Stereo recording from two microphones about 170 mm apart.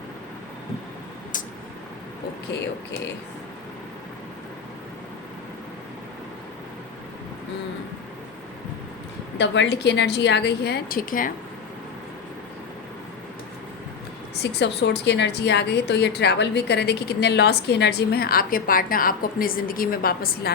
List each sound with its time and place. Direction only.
9.4 s a woman's voice: 90° left; by 11.3 s 55° left (ahead or behind)
14.4 s a woman's voice: 90° left; by 20.5 s 60° left (ahead or behind)